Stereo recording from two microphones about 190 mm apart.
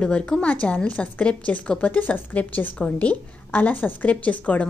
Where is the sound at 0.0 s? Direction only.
5° left (ahead or behind).